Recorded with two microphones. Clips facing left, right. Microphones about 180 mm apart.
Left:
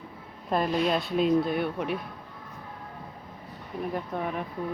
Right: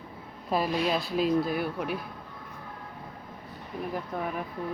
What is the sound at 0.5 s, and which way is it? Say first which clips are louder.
Speech: left 2 dB; 5° right (ahead or behind).